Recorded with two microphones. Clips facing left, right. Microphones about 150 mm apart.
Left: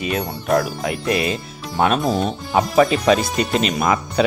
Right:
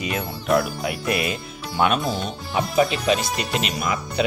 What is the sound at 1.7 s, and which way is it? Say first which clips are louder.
Speech: left 3 dB; 40° left (ahead or behind).